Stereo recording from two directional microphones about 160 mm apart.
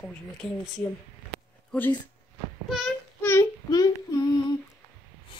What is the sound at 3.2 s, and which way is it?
Child singing, 15° left (ahead or behind).